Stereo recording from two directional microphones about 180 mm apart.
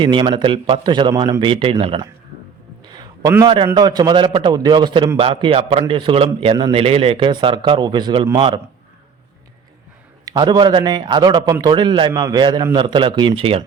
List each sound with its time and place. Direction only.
0.0 s a man's voice: 25° right (ahead or behind)
2.9 s a sound: 20° right (ahead or behind)
3.8 s a man's voice: 25° right (ahead or behind)
10.2 s a man's voice: 20° right (ahead or behind)